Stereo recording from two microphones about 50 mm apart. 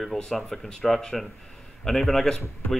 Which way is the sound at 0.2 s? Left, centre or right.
Centre.